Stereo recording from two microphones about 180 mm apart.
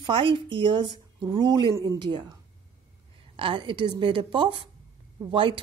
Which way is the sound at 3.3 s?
30° right (ahead or behind).